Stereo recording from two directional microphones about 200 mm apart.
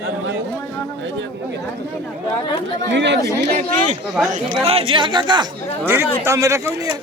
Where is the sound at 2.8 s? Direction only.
60° right (ahead or behind).